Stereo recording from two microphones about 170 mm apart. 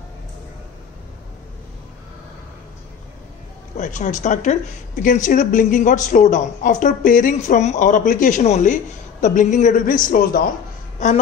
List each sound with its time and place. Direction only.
3.7 s speech: 45° left (ahead or behind)
11.0 s speech: 45° left (ahead or behind)